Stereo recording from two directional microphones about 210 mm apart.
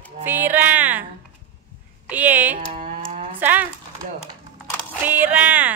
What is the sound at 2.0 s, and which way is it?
Speech, 5° right (ahead or behind).